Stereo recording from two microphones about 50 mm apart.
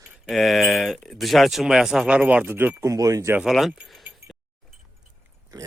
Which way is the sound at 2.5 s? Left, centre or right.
Right.